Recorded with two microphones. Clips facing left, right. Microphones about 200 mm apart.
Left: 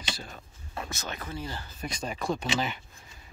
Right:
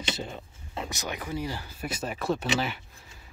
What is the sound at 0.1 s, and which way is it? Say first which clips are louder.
Speech: right 4 dB; 20° right (ahead or behind).